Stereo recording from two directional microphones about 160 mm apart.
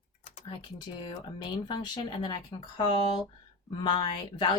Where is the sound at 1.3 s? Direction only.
30° left (ahead or behind).